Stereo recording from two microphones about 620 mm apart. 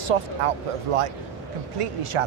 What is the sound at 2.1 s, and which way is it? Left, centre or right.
Speech, right.